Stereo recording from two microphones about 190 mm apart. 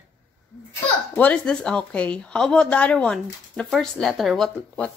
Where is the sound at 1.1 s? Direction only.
5° left (ahead or behind).